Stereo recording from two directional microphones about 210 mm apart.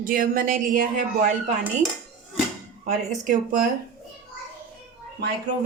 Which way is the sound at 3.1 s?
40° right (ahead or behind).